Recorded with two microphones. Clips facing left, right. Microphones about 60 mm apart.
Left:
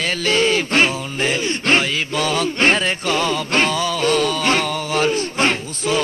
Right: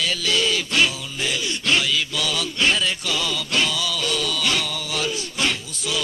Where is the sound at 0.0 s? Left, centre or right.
Left.